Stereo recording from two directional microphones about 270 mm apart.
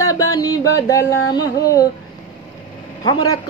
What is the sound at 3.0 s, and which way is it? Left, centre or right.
Speech, centre.